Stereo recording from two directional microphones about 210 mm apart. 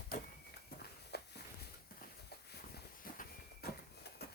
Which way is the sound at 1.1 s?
50° left (ahead or behind).